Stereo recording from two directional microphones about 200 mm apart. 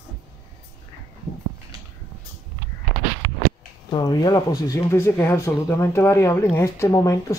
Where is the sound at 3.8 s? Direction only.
20° left (ahead or behind).